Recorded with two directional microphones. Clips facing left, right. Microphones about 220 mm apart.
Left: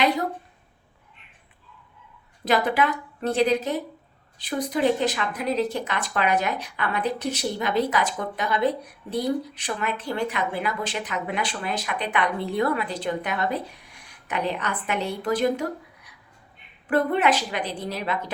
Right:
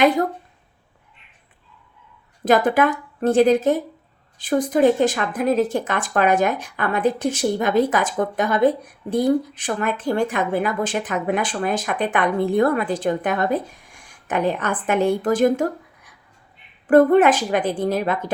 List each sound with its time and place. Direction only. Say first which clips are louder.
2.4 s a woman's voice: right 6 dB; 50° right (ahead or behind)
16.9 s speech: right 8 dB; 50° right (ahead or behind)